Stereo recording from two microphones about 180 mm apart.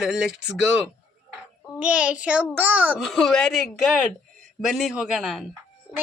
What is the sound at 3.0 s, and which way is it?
Speech, centre (ahead or behind).